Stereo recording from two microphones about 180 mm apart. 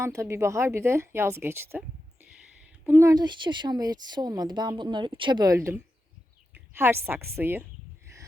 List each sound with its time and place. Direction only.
0.0 s speech: 15° right (ahead or behind)
2.8 s a woman's voice: 15° right (ahead or behind)
8.1 s a sound: 15° right (ahead or behind)